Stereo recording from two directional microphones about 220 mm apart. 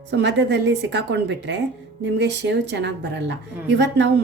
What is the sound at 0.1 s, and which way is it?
A woman's voice, 50° right (ahead or behind).